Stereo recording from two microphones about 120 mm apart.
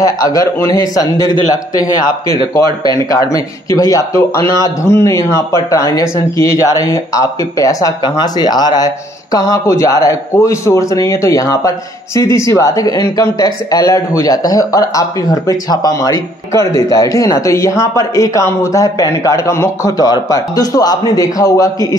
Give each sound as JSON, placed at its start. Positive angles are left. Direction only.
{"t": 0.0, "sound": "speech", "side_deg": 30}